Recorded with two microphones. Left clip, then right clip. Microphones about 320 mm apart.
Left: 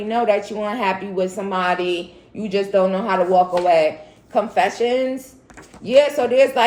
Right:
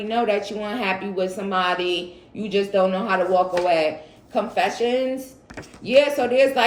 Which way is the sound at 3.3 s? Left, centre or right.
Centre.